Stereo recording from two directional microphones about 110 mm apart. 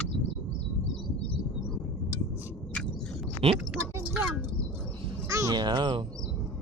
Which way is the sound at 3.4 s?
55° right (ahead or behind).